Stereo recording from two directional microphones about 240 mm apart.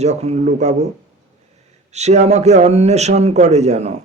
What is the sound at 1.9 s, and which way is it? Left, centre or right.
Speech, right.